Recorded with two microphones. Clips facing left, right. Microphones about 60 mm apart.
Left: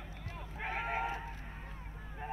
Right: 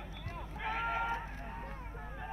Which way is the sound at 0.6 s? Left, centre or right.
Left.